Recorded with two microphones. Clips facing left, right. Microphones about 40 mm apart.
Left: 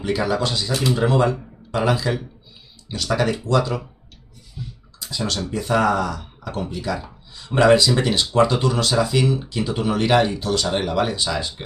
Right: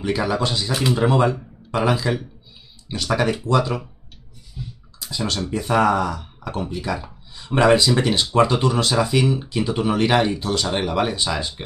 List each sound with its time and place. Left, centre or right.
0.0 s speech: centre
5.5 s speech: centre